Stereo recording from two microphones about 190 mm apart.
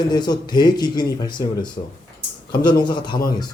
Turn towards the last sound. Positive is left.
turn(degrees=25)  # may be behind; listen again after turning